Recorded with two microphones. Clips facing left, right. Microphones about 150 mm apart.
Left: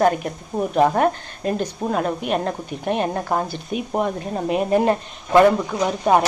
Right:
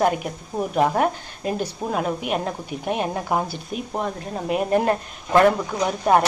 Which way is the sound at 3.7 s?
5° left (ahead or behind).